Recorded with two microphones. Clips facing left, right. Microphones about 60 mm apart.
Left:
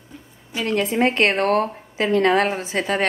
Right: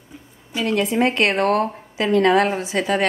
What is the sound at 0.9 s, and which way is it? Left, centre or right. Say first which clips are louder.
Speech: left 2 dB; left.